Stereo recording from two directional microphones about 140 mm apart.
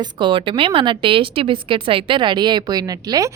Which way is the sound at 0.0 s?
35° right (ahead or behind).